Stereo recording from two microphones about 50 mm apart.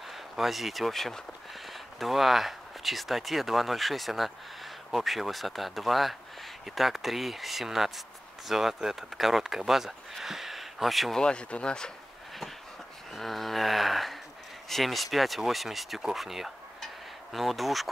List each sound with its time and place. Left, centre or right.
0.1 s speech: centre
11.1 s speech: centre
13.1 s speech: centre
16.8 s a sound: centre